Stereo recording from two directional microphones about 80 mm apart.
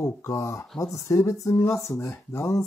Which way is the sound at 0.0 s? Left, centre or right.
Left.